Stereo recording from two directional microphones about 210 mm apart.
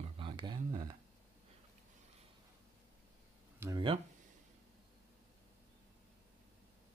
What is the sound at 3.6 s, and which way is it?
Speech, 20° right (ahead or behind).